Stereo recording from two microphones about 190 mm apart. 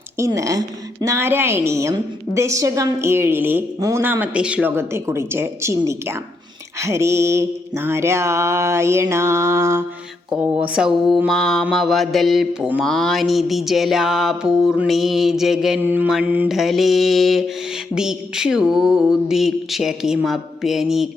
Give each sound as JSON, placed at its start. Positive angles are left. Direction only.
{"t": 0.2, "sound": "a woman's voice", "side_deg": -15}
{"t": 10.4, "sound": "music", "side_deg": -5}